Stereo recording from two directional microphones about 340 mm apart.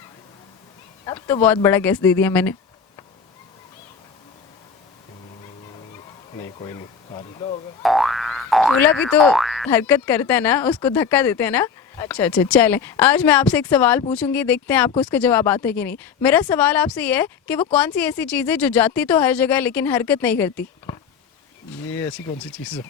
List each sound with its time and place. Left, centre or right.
1.0 s speech: centre
6.6 s speech: centre
7.8 s boing: centre
9.0 s speech: centre
22.5 s speech: centre